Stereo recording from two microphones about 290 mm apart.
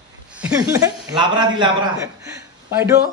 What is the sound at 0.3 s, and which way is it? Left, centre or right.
A man's voice, centre.